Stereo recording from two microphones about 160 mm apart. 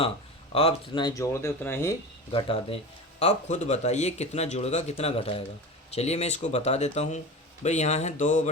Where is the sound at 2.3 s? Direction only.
35° left (ahead or behind).